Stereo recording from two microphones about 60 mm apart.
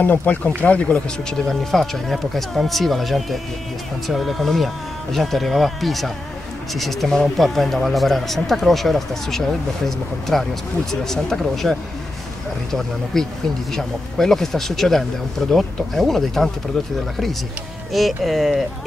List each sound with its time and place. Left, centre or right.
0.0 s speech: left
1.5 s speech: centre
12.7 s speech: centre
17.9 s speech: centre